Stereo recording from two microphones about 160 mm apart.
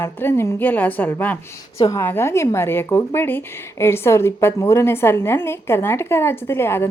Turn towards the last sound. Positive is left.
turn(degrees=15)  # may be behind; listen again after turning